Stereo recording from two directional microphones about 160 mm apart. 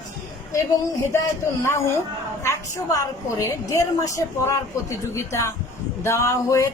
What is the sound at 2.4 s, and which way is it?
A woman's voice, 20° left (ahead or behind).